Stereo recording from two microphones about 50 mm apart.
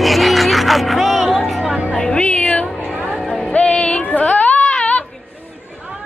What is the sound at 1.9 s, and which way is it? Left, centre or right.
Music, centre.